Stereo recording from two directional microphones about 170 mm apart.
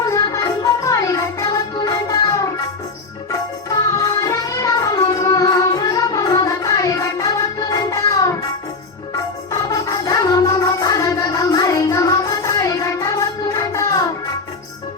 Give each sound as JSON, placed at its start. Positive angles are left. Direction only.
{"t": 0.0, "sound": "music", "side_deg": 20}